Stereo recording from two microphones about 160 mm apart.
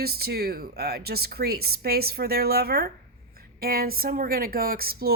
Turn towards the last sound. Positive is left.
turn(degrees=-70)  # may be behind; listen again after turning